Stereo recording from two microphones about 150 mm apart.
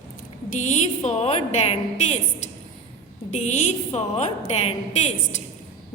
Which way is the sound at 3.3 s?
50° left (ahead or behind).